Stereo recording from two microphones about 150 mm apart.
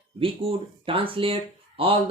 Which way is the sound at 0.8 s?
35° right (ahead or behind).